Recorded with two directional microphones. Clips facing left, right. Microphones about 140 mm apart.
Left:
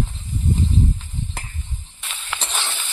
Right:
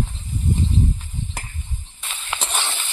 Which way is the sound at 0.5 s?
15° right (ahead or behind).